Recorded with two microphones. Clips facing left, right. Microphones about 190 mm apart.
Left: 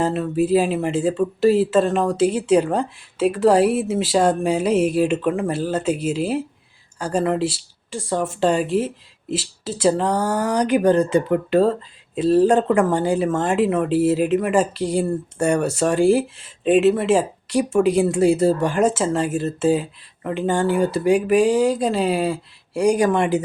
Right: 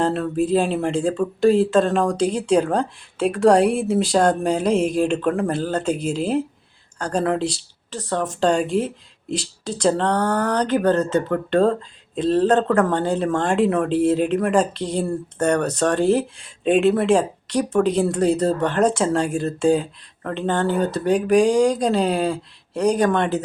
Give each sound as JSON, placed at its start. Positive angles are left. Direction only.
{"t": 0.0, "sound": "speech", "side_deg": 5}